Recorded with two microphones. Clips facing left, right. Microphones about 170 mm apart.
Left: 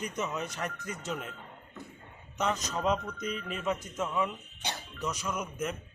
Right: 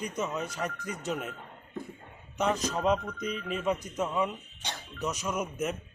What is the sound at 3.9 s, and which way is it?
Speech, 15° right (ahead or behind).